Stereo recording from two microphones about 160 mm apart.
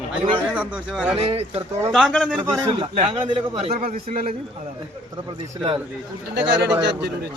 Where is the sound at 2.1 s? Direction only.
5° right (ahead or behind).